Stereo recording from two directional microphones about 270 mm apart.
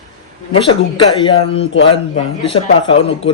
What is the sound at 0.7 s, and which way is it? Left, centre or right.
Speech, centre.